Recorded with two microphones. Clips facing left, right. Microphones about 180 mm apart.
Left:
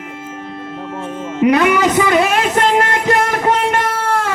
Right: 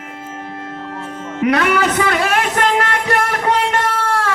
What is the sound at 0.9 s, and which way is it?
Music, 20° left (ahead or behind).